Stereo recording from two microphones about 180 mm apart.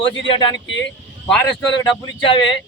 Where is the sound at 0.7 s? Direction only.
90° left.